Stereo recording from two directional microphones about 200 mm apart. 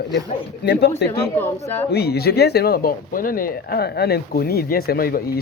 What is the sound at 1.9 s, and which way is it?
Speech, 55° left (ahead or behind).